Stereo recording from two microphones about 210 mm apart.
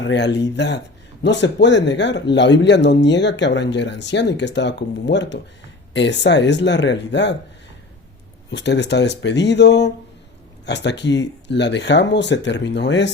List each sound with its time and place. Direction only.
0.0 s speech: 55° left (ahead or behind)
8.4 s speech: 55° left (ahead or behind)